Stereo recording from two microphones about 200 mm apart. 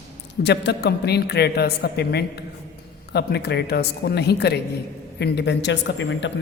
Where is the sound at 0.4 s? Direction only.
55° left (ahead or behind).